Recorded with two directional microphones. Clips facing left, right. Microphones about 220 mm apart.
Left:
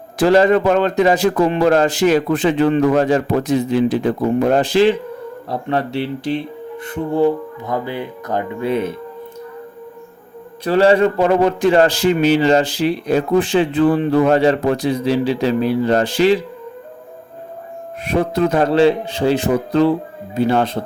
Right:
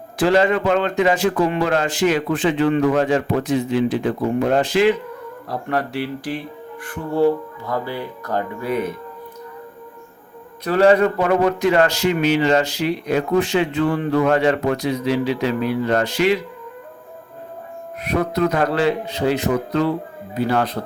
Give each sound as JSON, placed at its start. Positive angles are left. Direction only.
{"t": 0.2, "sound": "a man's voice", "side_deg": 40}
{"t": 10.6, "sound": "a man's voice", "side_deg": 30}
{"t": 18.0, "sound": "speech", "side_deg": 30}